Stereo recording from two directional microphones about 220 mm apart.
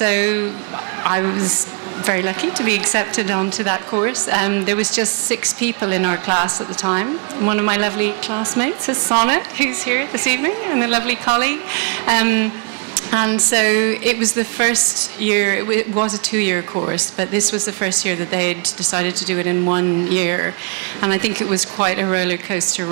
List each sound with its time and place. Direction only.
0.0 s a woman's voice: 15° right (ahead or behind)